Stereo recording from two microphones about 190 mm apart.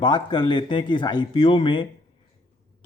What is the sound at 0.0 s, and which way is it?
Speech, 25° left (ahead or behind).